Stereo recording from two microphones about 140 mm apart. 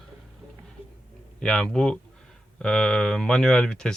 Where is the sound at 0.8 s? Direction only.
40° left (ahead or behind).